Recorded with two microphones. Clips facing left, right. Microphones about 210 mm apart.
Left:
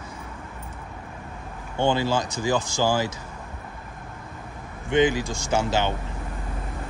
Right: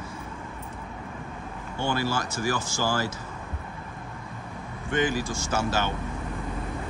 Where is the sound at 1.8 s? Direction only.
15° left (ahead or behind).